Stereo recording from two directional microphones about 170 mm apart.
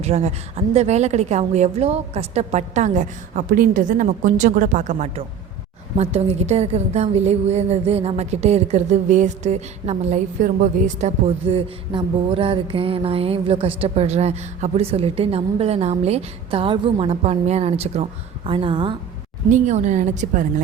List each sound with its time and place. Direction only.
0.0 s a woman's voice: 40° right (ahead or behind)
19.5 s a woman's voice: 45° right (ahead or behind)